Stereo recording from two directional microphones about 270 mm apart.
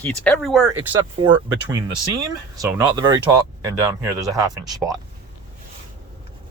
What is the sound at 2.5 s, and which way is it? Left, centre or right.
Speech, centre.